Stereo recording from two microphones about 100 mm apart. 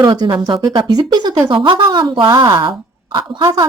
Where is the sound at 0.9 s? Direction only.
45° right (ahead or behind).